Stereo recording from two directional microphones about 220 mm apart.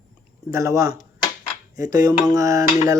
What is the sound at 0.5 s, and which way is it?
Speech, 15° right (ahead or behind).